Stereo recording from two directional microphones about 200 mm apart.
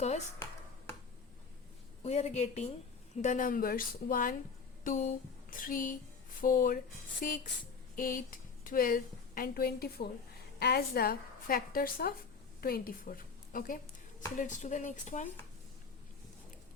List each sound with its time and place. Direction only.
2.0 s a woman's voice: 35° left (ahead or behind)
4.8 s a sound: 40° left (ahead or behind)
6.4 s a woman's voice: 45° left (ahead or behind)